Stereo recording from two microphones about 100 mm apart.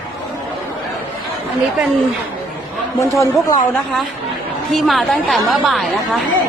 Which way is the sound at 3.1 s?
30° left (ahead or behind).